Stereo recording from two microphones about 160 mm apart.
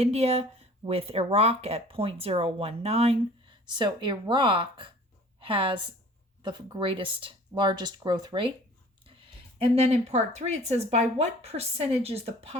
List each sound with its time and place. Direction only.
0.0 s speech: 40° right (ahead or behind)
3.7 s a woman's voice: 30° right (ahead or behind)
9.7 s speech: 40° right (ahead or behind)